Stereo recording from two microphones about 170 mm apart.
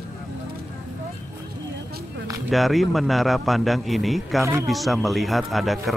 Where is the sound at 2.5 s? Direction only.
Centre (ahead or behind).